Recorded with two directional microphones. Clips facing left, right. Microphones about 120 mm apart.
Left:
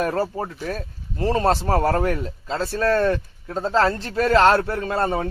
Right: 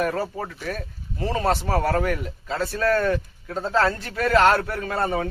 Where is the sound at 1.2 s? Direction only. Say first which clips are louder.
Left 3 dB; 35° left (ahead or behind).